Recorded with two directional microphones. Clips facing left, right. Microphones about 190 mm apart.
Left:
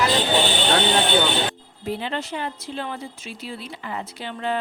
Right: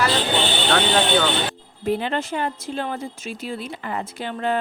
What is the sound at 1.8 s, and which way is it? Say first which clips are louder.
Speech: right 5 dB; 50° right (ahead or behind).